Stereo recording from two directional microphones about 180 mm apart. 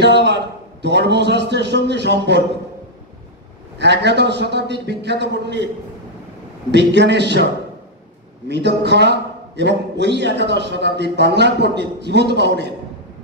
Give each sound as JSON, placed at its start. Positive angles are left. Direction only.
{"t": 0.0, "sound": "a man's voice", "side_deg": -70}
{"t": 3.7, "sound": "a man's voice", "side_deg": -70}
{"t": 6.7, "sound": "a man's voice", "side_deg": -75}
{"t": 8.5, "sound": "a man's voice", "side_deg": -75}